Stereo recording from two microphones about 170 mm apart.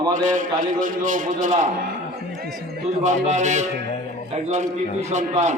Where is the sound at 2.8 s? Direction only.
45° right (ahead or behind).